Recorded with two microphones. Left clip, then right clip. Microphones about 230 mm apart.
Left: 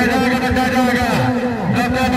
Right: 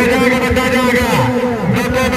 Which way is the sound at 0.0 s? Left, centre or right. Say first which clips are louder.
Right 4 dB; right.